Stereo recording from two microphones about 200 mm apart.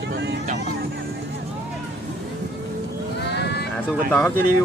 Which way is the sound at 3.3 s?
55° left (ahead or behind).